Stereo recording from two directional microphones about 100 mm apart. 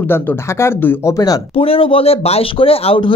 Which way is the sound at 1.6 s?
65° left (ahead or behind).